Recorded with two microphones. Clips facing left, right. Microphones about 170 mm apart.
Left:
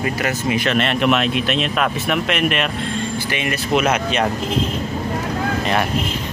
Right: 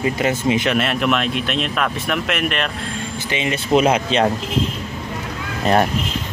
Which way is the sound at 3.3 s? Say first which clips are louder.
Right 4 dB; 20° right (ahead or behind).